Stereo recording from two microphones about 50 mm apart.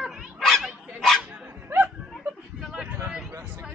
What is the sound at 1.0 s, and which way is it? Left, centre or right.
Dog, centre.